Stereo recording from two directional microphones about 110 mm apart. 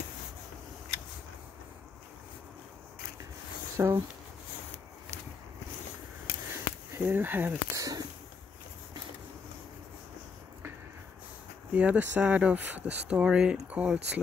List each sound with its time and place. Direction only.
3.7 s speech: 25° right (ahead or behind)
6.9 s speech: 15° right (ahead or behind)
7.7 s speech: 30° right (ahead or behind)
11.7 s speech: 15° right (ahead or behind)